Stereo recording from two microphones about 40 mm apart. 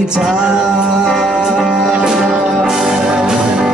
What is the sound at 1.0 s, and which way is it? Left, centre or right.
Music, centre.